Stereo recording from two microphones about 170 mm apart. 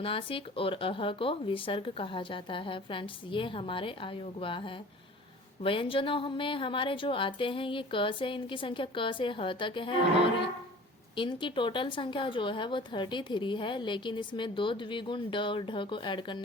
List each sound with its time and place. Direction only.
0.0 s speech: 30° left (ahead or behind)